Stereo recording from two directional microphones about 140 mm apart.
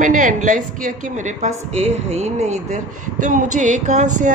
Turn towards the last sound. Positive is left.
turn(degrees=-60)  # may be behind; listen again after turning